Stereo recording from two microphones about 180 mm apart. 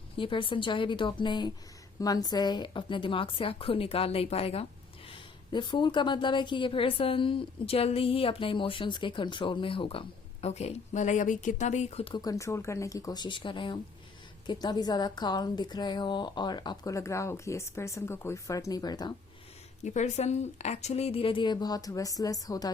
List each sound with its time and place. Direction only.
0.2 s a woman's voice: 30° left (ahead or behind)
19.8 s a woman's voice: 40° left (ahead or behind); by 22.7 s 20° left (ahead or behind)